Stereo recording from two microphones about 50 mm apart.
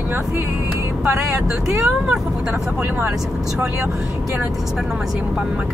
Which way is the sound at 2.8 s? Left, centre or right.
Right.